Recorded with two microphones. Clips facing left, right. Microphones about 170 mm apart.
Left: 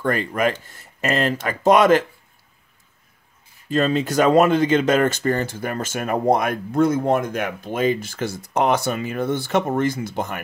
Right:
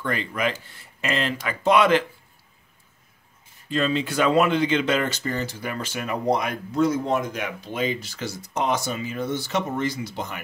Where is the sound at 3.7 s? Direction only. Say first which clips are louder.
Left 4 dB; 45° left (ahead or behind).